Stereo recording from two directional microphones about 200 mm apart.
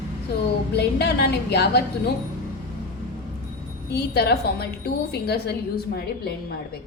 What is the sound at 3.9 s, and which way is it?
A woman's voice, 55° left (ahead or behind).